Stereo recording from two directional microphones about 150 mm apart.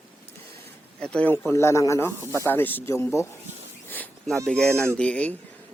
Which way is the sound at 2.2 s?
20° right (ahead or behind).